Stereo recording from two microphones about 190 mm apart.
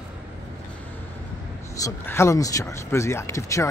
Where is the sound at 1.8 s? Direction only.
15° left (ahead or behind).